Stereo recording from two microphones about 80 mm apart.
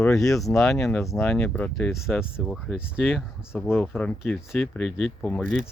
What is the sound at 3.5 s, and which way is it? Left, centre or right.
Speech, centre.